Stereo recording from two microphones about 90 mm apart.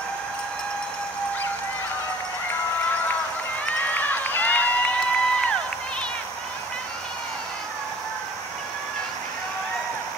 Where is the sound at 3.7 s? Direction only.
20° left (ahead or behind).